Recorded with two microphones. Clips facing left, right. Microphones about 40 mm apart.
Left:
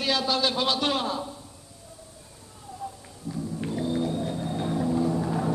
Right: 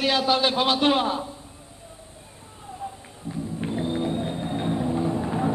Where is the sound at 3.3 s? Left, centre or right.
Right.